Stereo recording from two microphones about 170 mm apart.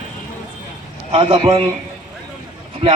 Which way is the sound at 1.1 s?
35° right (ahead or behind).